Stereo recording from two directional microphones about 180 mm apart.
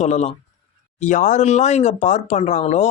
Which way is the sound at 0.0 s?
40° left (ahead or behind).